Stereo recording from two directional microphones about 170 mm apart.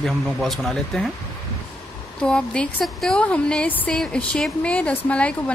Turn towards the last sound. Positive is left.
turn(degrees=5)  # may be behind; listen again after turning